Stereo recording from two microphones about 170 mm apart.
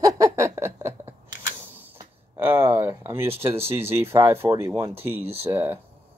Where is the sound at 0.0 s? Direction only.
20° right (ahead or behind).